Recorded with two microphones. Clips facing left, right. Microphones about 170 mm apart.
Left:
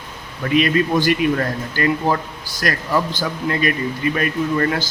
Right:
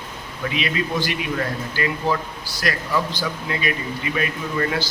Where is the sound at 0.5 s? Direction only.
50° left (ahead or behind).